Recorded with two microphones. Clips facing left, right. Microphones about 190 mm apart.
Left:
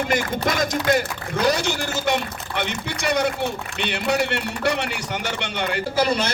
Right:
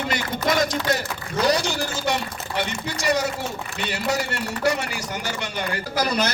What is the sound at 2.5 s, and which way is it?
Speech, 60° left (ahead or behind).